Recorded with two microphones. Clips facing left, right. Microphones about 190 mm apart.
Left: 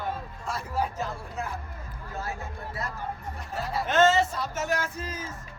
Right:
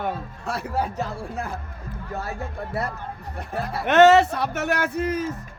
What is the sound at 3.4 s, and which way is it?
Speech, 55° right (ahead or behind).